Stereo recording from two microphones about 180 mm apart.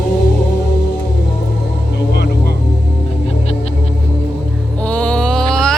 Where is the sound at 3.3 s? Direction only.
35° left (ahead or behind).